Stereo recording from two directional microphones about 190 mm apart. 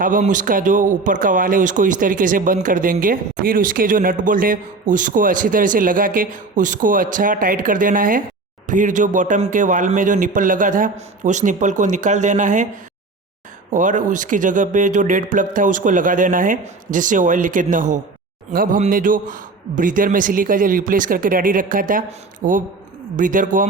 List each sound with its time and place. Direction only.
0.0 s speech: 45° right (ahead or behind)
13.7 s speech: 45° right (ahead or behind)